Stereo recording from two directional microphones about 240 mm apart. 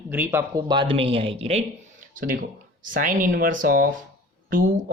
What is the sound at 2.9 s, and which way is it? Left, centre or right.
Speech, right.